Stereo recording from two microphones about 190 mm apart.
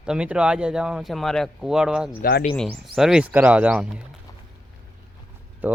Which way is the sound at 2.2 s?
50° left (ahead or behind).